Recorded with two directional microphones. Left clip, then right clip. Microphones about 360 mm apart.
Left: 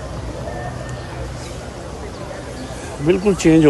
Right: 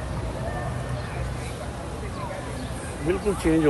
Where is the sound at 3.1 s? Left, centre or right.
Left.